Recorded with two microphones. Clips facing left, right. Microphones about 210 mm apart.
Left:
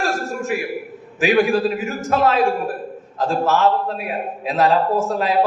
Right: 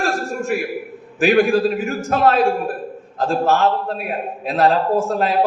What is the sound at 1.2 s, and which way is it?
A man's voice, 45° right (ahead or behind).